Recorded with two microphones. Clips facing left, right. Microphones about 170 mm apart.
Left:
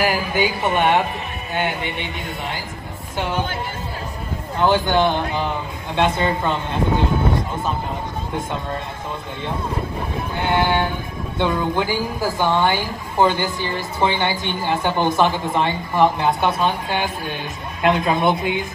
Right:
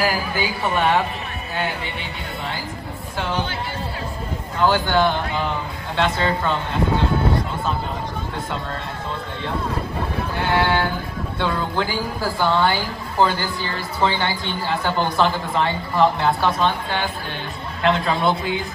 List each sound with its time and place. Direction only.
0.0 s a woman's voice: 20° left (ahead or behind)
4.6 s a woman's voice: 25° left (ahead or behind)
10.4 s a woman's voice: 20° left (ahead or behind)